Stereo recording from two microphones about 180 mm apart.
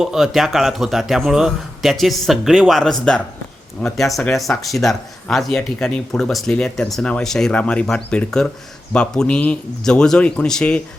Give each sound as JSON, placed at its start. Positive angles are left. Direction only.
{"t": 0.0, "sound": "speech", "side_deg": 0}